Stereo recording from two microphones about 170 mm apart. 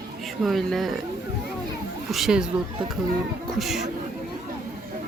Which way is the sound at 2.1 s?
5° right (ahead or behind).